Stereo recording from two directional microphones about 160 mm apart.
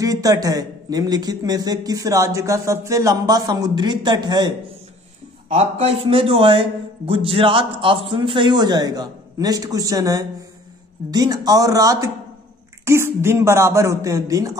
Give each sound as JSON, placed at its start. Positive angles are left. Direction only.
{"t": 0.0, "sound": "a man's voice", "side_deg": -20}
{"t": 5.5, "sound": "a man's voice", "side_deg": -40}